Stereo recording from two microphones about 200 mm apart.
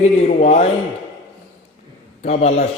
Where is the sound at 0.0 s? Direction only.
35° left (ahead or behind).